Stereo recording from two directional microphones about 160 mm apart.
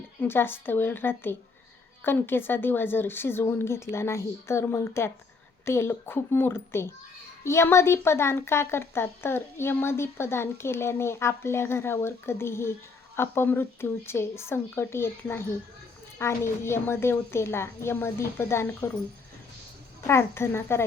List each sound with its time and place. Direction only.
0.2 s speech: 15° left (ahead or behind)
20.1 s speech: 15° left (ahead or behind)